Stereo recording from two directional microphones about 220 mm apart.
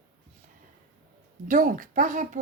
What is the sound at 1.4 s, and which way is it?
Speech, 35° right (ahead or behind).